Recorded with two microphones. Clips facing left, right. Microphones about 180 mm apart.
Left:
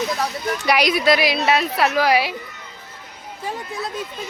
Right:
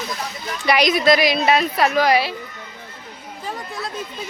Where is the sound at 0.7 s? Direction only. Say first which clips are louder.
Right 2 dB; 10° left (ahead or behind).